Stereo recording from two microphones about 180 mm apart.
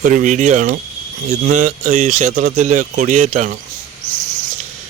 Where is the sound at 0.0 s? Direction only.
45° right (ahead or behind).